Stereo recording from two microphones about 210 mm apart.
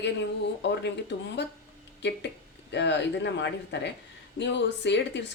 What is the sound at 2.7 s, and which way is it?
Speech, 55° left (ahead or behind).